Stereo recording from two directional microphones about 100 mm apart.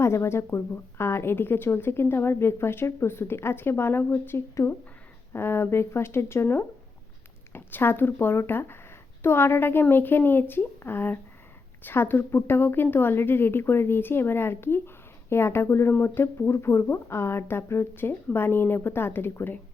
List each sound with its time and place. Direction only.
0.0 s speech: 25° left (ahead or behind)